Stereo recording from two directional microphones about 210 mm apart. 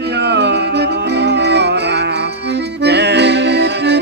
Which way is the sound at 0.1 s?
55° right (ahead or behind).